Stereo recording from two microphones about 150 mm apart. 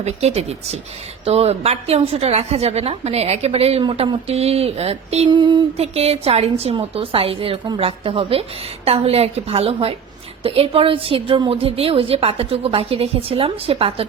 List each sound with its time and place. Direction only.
0.0 s a woman's voice: 45° right (ahead or behind); by 5.6 s 30° right (ahead or behind)
5.7 s a woman's voice: 45° right (ahead or behind)